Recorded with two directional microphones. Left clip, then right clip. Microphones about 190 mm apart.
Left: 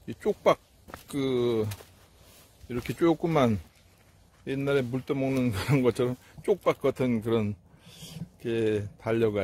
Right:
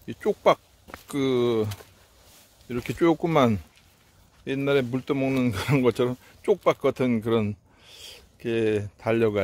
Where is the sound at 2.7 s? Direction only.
20° right (ahead or behind).